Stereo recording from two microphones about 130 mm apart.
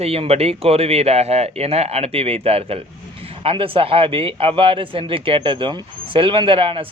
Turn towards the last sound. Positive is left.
turn(degrees=-45)  # may be behind; listen again after turning